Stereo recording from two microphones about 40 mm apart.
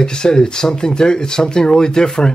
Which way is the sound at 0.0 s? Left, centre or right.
Centre.